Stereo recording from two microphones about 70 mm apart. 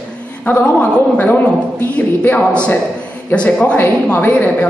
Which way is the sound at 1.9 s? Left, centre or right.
Left.